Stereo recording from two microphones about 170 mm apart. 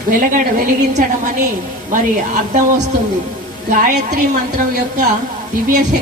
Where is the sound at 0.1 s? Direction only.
50° right (ahead or behind).